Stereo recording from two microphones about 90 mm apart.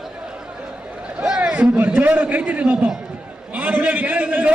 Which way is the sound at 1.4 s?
15° right (ahead or behind).